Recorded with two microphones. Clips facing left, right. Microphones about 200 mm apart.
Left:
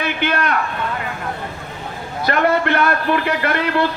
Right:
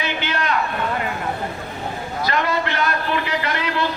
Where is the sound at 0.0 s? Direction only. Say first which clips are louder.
Left 4 dB; 55° left (ahead or behind).